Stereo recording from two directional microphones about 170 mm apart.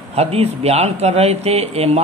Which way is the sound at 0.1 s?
35° right (ahead or behind).